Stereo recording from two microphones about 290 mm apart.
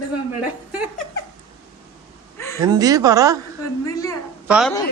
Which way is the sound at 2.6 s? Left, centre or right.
Centre.